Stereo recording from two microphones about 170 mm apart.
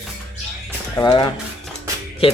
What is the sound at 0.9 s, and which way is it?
Speech, 25° left (ahead or behind).